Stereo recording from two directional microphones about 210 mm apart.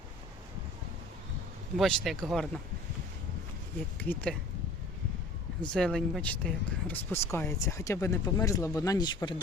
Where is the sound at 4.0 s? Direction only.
10° left (ahead or behind).